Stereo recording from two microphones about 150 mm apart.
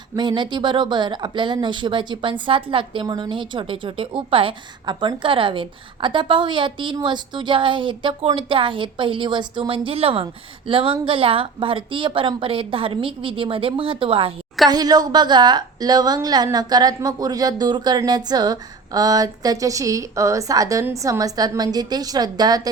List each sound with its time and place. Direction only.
0.2 s a woman's voice: 30° right (ahead or behind)
14.7 s a woman's voice: 25° right (ahead or behind)